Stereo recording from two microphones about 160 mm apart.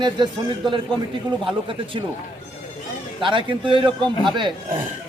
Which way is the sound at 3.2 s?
30° right (ahead or behind).